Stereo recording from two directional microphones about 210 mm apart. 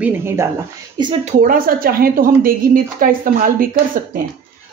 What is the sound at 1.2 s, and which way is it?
A woman's voice, 40° right (ahead or behind).